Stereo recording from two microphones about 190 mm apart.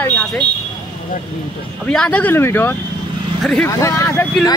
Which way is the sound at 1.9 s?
5° left (ahead or behind).